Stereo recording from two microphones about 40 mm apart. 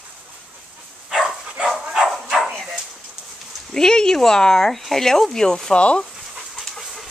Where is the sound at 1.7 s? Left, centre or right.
Centre.